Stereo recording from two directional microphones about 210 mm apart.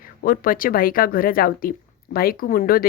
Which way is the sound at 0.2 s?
40° left (ahead or behind).